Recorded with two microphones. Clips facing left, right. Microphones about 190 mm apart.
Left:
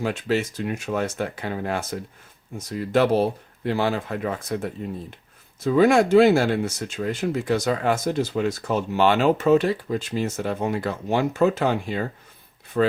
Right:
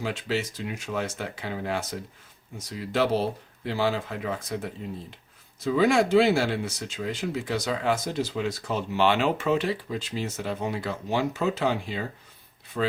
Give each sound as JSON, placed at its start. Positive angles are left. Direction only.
{"t": 0.0, "sound": "speech", "side_deg": 50}